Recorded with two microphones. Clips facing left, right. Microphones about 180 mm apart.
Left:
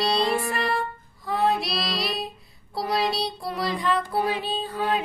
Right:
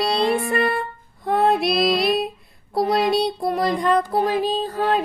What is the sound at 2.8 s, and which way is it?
Child singing, 50° right (ahead or behind).